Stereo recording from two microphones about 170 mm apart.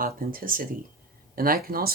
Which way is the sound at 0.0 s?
55° right (ahead or behind).